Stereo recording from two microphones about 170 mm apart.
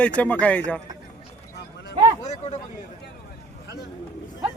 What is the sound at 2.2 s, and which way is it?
Speech, 40° left (ahead or behind).